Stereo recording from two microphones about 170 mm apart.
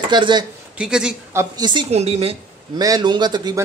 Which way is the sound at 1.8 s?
40° right (ahead or behind).